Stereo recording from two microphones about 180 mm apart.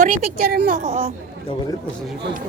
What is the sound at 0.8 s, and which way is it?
Speech, 35° right (ahead or behind).